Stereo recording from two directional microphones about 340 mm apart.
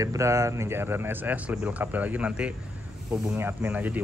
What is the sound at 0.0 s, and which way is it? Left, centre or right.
Speech, centre.